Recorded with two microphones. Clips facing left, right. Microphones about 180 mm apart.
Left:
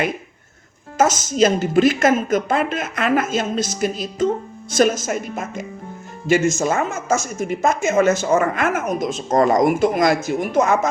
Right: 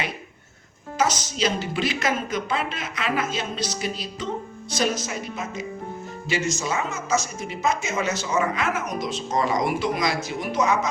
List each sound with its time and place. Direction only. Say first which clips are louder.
0.9 s speech: left 8 dB; 50° left (ahead or behind)